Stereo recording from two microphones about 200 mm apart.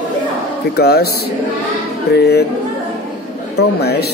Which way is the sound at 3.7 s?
55° left (ahead or behind).